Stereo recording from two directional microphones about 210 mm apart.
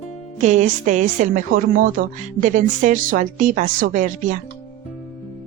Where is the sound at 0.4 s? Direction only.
35° right (ahead or behind).